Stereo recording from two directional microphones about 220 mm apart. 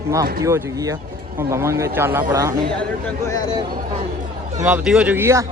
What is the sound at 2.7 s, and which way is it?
Speech, 5° left (ahead or behind).